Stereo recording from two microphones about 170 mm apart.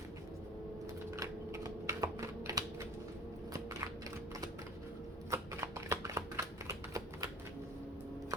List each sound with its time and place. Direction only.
1.1 s typing: 15° right (ahead or behind)
5.3 s shuffling cards: 15° right (ahead or behind)